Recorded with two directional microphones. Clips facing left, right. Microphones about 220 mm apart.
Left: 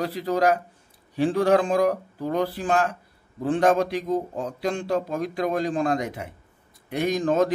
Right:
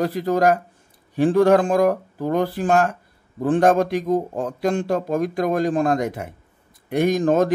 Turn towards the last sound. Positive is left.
turn(degrees=-50)  # may be behind; listen again after turning